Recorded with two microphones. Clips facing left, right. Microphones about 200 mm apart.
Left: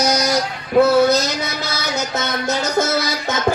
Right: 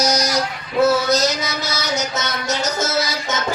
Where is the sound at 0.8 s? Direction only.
55° left (ahead or behind).